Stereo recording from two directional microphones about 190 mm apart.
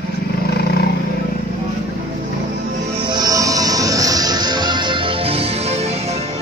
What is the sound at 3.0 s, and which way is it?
Music, 25° right (ahead or behind).